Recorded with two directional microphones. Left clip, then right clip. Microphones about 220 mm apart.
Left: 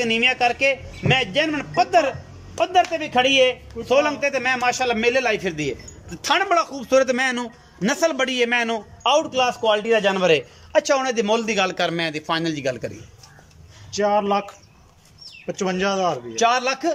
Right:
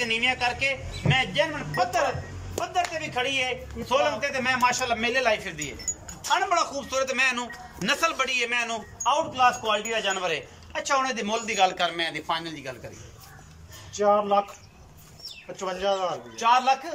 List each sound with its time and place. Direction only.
0.0 s a man's voice: 55° left (ahead or behind)
6.2 s a man's voice: 40° left (ahead or behind)
13.9 s a man's voice: 45° left (ahead or behind)
15.5 s a man's voice: 45° left (ahead or behind)